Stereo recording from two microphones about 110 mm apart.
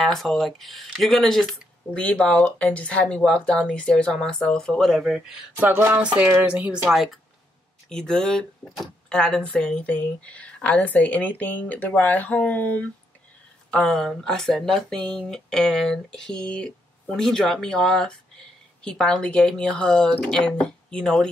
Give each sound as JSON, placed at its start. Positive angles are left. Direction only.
{"t": 0.0, "sound": "speech", "side_deg": 0}
{"t": 5.7, "sound": "a sound", "side_deg": -20}
{"t": 6.0, "sound": "speech", "side_deg": -10}